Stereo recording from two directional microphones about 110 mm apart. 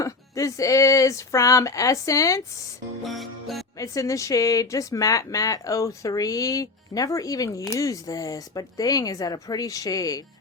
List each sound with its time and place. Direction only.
0.0 s speech: 30° left (ahead or behind)
3.1 s music: centre (ahead or behind)
3.8 s speech: 30° left (ahead or behind)